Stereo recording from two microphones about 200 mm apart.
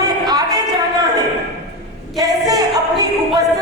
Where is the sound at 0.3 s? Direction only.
20° right (ahead or behind).